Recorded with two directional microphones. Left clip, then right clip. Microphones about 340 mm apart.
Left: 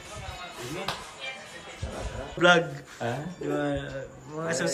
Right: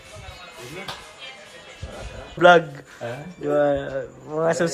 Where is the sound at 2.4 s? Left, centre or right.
Centre.